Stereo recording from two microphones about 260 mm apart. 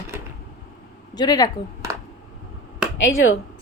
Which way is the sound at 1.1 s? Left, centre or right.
Centre.